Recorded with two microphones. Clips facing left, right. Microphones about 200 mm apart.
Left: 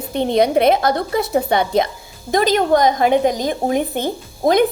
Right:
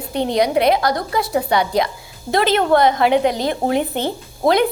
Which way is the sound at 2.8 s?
45° left (ahead or behind).